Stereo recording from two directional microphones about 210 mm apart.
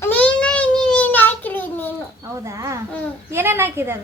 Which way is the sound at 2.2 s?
15° right (ahead or behind).